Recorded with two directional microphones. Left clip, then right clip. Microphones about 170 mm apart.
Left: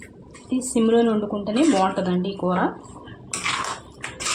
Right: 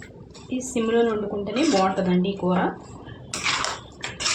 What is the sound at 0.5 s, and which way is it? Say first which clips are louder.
Speech: left 4 dB; 30° left (ahead or behind).